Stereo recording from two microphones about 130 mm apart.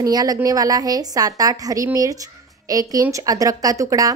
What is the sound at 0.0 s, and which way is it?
A woman's voice, 30° right (ahead or behind).